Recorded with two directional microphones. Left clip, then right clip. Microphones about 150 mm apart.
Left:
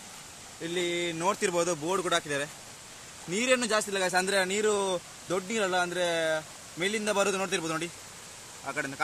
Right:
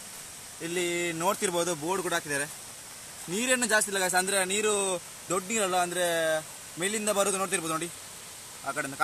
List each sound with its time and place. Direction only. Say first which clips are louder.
0.7 s speech: right 1 dB; 20° right (ahead or behind)
1.3 s speech: left 1 dB; 5° right (ahead or behind); by 4.6 s 15° left (ahead or behind)
4.6 s speech: left 1 dB; centre (ahead or behind)